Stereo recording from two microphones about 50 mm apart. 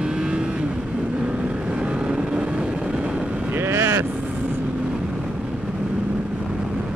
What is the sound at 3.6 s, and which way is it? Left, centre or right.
Vehicle, right.